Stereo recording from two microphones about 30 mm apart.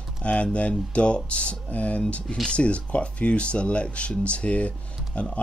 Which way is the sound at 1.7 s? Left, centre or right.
Left.